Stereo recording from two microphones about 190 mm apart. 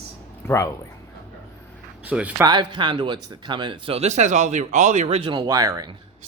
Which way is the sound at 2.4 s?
25° right (ahead or behind).